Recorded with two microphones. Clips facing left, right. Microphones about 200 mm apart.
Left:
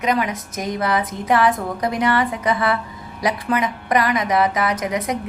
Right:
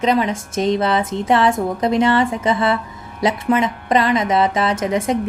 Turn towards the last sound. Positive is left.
turn(degrees=-25)  # may be behind; listen again after turning